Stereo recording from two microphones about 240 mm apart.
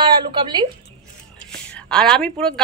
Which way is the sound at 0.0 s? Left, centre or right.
Centre.